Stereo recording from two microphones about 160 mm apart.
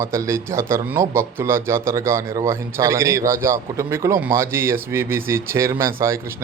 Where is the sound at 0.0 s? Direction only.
15° right (ahead or behind).